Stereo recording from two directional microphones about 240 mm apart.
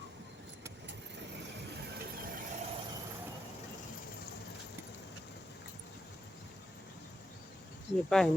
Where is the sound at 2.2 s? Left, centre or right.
Right.